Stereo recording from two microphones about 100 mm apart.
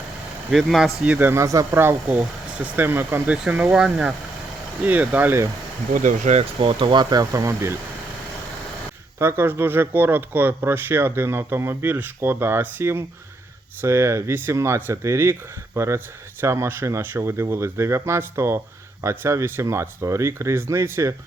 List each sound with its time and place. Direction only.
0.5 s speech: centre (ahead or behind)
1.1 s speech: 20° right (ahead or behind)
6.3 s speech: 65° right (ahead or behind); by 7.8 s 30° right (ahead or behind)
9.1 s speech: 25° right (ahead or behind)